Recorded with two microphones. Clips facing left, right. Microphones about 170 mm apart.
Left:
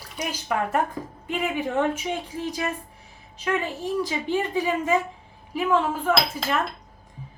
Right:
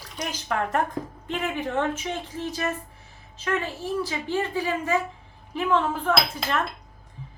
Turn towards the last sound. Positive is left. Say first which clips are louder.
# left 1 dB
turn(degrees=0)  # may be behind; listen again after turning